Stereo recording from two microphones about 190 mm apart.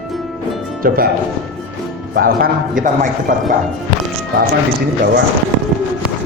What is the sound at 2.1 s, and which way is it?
A man's voice, 50° right (ahead or behind).